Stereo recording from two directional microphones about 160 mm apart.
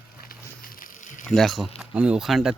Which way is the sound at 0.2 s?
65° left (ahead or behind).